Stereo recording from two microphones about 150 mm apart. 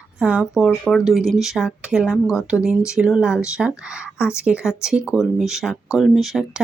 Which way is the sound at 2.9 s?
5° right (ahead or behind).